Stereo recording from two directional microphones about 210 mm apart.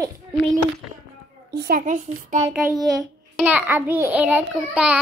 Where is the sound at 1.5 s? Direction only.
50° right (ahead or behind).